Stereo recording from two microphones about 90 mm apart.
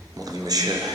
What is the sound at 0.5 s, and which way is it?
Speech, 45° right (ahead or behind).